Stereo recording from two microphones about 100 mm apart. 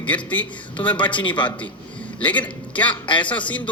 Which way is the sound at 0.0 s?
15° left (ahead or behind).